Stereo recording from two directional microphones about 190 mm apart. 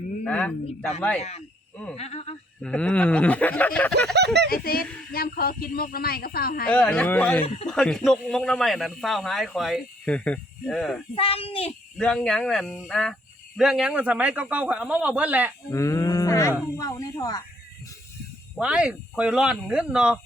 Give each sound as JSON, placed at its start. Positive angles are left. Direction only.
{"t": 0.3, "sound": "speech", "side_deg": 5}
{"t": 1.2, "sound": "speech", "side_deg": 35}
{"t": 2.6, "sound": "speech", "side_deg": 5}
{"t": 4.1, "sound": "speech", "side_deg": -60}
{"t": 4.4, "sound": "speech", "side_deg": 50}
{"t": 6.7, "sound": "speech", "side_deg": 5}
{"t": 7.4, "sound": "speech", "side_deg": 30}
{"t": 7.7, "sound": "speech", "side_deg": 0}
{"t": 11.1, "sound": "a child's voice", "side_deg": 30}
{"t": 11.9, "sound": "speech", "side_deg": 5}
{"t": 15.7, "sound": "speech", "side_deg": 15}
{"t": 18.5, "sound": "speech", "side_deg": -5}